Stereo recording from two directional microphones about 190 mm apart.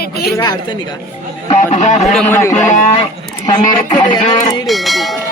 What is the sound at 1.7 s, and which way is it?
Speech, 35° left (ahead or behind).